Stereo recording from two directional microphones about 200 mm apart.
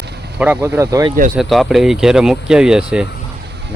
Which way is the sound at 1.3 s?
Centre (ahead or behind).